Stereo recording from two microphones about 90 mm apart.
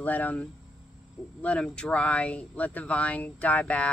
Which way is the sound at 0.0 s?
20° left (ahead or behind).